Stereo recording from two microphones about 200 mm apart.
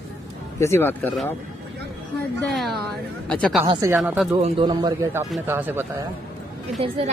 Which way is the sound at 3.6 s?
20° right (ahead or behind).